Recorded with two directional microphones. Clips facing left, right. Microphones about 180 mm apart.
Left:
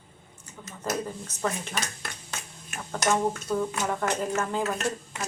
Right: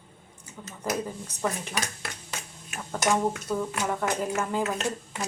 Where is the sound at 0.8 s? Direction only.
10° right (ahead or behind).